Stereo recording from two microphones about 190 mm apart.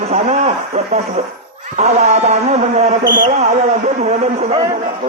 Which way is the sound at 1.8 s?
35° right (ahead or behind).